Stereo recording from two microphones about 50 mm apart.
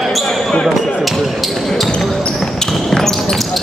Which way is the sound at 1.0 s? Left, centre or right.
Centre.